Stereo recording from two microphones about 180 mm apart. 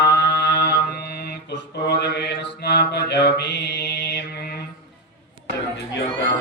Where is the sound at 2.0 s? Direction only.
70° left (ahead or behind).